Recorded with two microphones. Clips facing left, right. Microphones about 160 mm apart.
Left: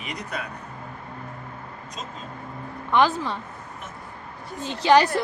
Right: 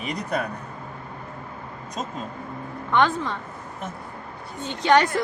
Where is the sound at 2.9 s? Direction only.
5° left (ahead or behind).